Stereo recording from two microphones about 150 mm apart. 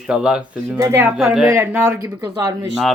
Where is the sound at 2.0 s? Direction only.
25° right (ahead or behind).